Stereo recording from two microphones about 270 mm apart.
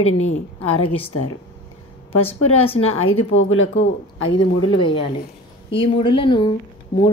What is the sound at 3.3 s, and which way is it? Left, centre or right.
Speech, left.